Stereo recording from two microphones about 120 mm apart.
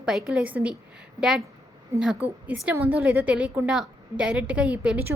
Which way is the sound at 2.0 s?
10° right (ahead or behind).